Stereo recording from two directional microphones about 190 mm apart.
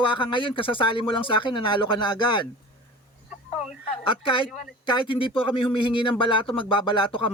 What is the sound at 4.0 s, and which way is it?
Speech, 25° left (ahead or behind).